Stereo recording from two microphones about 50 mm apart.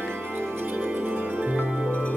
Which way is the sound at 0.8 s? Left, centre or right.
Right.